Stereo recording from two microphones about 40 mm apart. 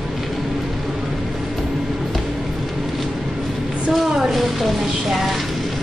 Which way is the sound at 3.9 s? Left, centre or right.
Centre.